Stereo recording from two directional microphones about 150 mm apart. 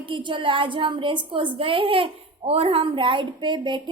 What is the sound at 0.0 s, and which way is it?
A woman's voice, 35° right (ahead or behind).